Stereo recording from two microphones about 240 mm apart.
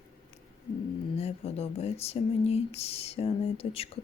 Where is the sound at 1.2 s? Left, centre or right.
Left.